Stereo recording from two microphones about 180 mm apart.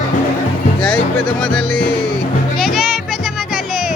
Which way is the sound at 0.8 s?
5° left (ahead or behind).